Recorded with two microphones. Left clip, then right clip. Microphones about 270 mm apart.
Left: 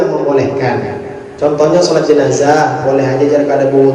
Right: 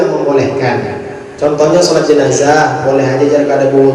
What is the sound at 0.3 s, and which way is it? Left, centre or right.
Speech, centre.